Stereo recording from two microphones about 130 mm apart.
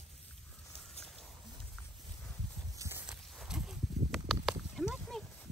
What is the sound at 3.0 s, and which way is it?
Horse, 5° right (ahead or behind).